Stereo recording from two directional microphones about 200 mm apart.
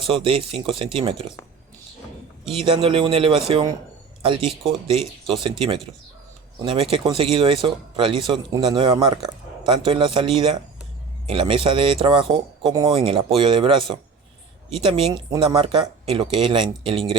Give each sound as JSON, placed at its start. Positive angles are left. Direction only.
{"t": 0.0, "sound": "speech", "side_deg": -25}
{"t": 2.5, "sound": "speech", "side_deg": -30}